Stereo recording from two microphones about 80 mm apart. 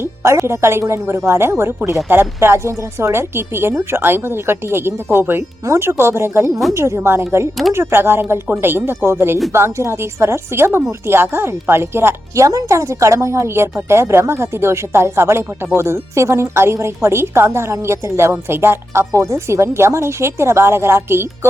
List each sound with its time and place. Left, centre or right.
0.0 s speech: right